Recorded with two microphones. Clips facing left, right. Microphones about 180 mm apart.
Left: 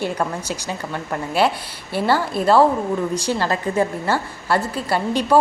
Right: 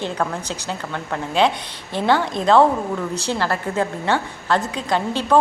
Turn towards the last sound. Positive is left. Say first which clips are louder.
# left 1 dB
turn(degrees=10)  # may be behind; listen again after turning